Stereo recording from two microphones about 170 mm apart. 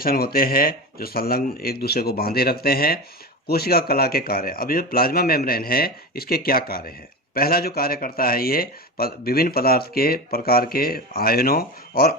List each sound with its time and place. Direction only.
0.0 s speech: 60° left (ahead or behind)